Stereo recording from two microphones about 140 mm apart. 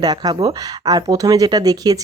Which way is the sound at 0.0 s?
30° right (ahead or behind).